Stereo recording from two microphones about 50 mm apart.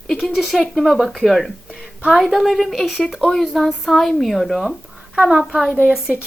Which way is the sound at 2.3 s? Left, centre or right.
Centre.